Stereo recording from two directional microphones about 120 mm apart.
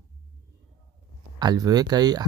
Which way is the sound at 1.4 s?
35° right (ahead or behind).